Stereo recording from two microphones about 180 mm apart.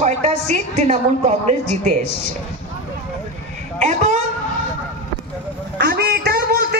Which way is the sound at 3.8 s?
40° right (ahead or behind).